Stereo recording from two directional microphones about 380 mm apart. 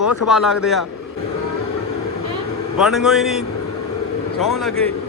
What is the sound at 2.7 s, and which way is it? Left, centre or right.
Speech, centre.